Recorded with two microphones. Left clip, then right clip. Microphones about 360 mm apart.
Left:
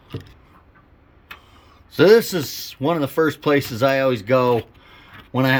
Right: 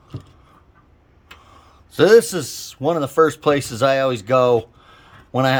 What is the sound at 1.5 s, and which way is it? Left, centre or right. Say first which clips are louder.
Speech: left 1 dB; centre.